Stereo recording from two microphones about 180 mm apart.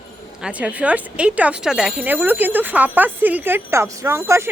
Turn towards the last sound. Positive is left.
turn(degrees=-15)  # may be behind; listen again after turning